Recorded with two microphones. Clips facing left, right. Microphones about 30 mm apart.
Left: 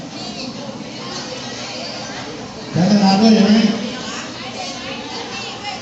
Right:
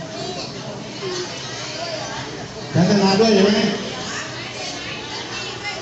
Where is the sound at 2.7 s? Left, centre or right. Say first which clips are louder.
Left 2 dB; left.